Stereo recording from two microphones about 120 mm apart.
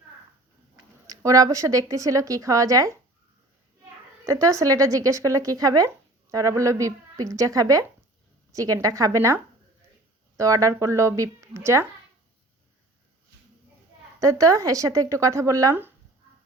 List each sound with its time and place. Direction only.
1.0 s speech: 30° right (ahead or behind)
4.3 s speech: 25° right (ahead or behind)
14.2 s speech: 25° right (ahead or behind)